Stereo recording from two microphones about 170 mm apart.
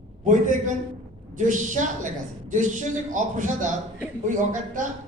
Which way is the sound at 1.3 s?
50° right (ahead or behind).